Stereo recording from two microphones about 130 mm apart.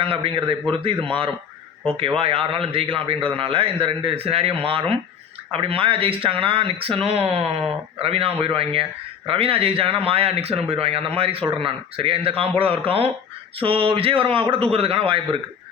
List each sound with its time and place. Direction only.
0.0 s speech: 45° right (ahead or behind)